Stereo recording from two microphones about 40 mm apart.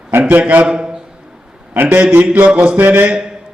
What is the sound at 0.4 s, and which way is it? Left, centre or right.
Speech, right.